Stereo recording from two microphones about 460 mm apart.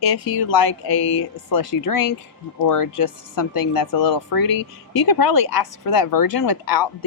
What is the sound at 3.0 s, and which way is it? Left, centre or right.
Speech, left.